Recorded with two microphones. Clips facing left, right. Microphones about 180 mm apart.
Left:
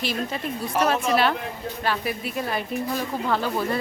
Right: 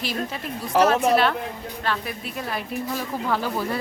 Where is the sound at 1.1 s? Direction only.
5° left (ahead or behind).